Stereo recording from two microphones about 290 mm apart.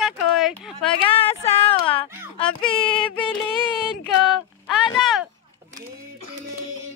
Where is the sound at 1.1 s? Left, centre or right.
Centre.